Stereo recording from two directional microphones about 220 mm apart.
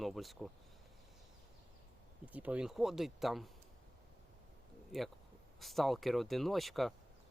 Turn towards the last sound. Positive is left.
turn(degrees=0)  # may be behind; listen again after turning